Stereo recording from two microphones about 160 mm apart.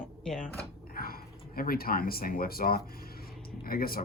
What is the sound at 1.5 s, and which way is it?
Speech, 65° left (ahead or behind).